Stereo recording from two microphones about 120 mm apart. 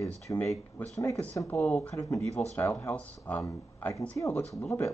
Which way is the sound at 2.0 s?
25° left (ahead or behind).